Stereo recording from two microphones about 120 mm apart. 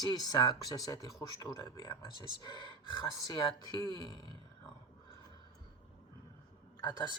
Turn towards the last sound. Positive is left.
turn(degrees=40)  # may be behind; listen again after turning